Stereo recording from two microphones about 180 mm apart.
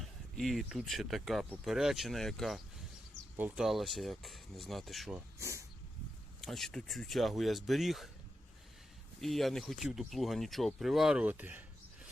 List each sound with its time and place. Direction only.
0.0 s speech: centre (ahead or behind)
5.4 s speech: 15° right (ahead or behind)
6.4 s speech: centre (ahead or behind)
9.2 s speech: centre (ahead or behind)